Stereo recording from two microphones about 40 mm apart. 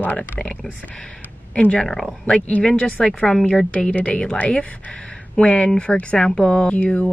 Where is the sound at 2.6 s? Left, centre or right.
Left.